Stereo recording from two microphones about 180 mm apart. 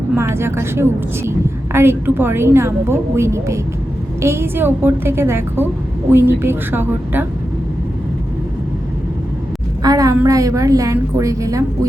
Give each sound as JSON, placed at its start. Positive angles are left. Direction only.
{"t": 0.2, "sound": "a woman's voice", "side_deg": -15}
{"t": 9.8, "sound": "a sound", "side_deg": -20}
{"t": 10.2, "sound": "a woman's voice", "side_deg": -20}